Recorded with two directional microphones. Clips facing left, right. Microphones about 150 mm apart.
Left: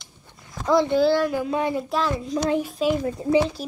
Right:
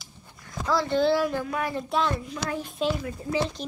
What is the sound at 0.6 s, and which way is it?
Speech, 20° left (ahead or behind).